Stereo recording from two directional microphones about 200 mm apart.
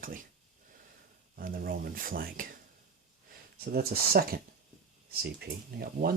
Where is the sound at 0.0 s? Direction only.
40° right (ahead or behind).